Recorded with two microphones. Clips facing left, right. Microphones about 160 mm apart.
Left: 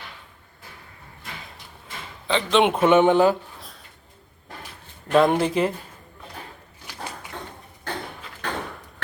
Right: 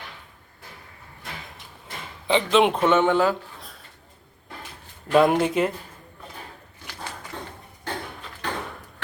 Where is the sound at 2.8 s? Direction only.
15° left (ahead or behind).